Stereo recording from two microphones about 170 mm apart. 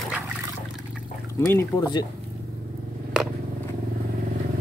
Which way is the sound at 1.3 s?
15° left (ahead or behind).